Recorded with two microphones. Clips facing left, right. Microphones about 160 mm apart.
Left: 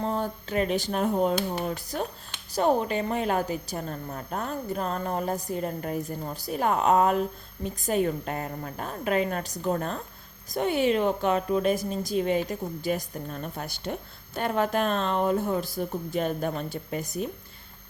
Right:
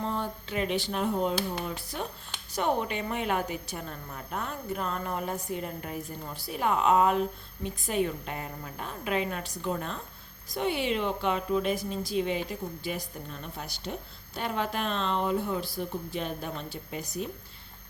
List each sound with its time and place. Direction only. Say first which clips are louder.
0.0 s a woman's voice: left 4 dB; 40° left (ahead or behind)